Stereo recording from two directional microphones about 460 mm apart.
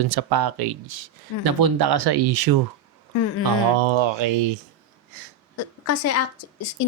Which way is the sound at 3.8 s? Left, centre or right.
Right.